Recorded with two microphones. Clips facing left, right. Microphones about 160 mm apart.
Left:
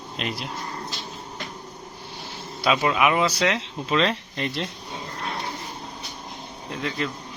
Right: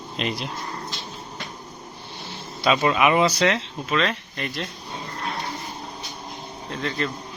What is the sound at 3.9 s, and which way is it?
Speech, 25° left (ahead or behind).